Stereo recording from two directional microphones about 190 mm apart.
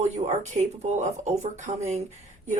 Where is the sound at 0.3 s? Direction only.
35° right (ahead or behind).